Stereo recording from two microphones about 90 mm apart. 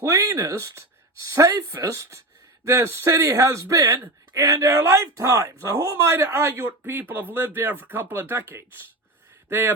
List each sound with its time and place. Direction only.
0.0 s speech: 40° right (ahead or behind); by 9.7 s 25° right (ahead or behind)